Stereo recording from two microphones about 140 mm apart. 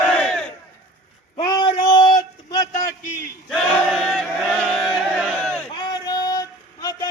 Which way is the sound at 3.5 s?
Centre (ahead or behind).